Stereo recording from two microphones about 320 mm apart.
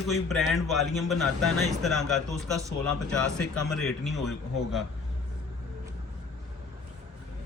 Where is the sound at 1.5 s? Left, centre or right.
Right.